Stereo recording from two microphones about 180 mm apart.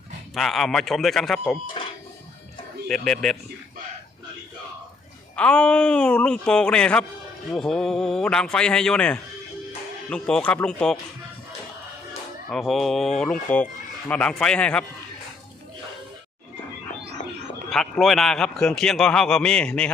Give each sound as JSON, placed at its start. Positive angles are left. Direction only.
{"t": 0.3, "sound": "a man's voice", "side_deg": 0}
{"t": 1.8, "sound": "a sound", "side_deg": 35}
{"t": 2.8, "sound": "a man's voice", "side_deg": 5}
{"t": 5.4, "sound": "a man's voice", "side_deg": 5}
{"t": 12.5, "sound": "a man's voice", "side_deg": 0}
{"t": 17.7, "sound": "a man's voice", "side_deg": 0}